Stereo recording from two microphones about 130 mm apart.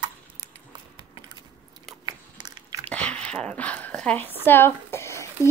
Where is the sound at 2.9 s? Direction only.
10° left (ahead or behind).